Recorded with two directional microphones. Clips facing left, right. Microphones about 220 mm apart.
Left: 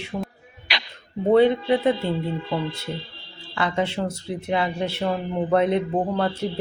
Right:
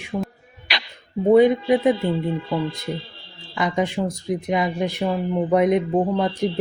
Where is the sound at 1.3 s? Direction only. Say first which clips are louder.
Right 2 dB; 15° right (ahead or behind).